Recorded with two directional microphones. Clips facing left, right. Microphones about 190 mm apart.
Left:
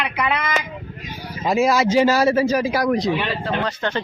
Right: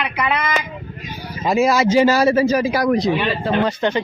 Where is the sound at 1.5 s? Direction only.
5° right (ahead or behind).